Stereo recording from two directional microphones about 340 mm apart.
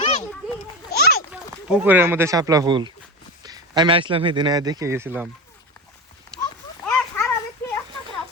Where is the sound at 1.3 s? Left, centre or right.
Centre.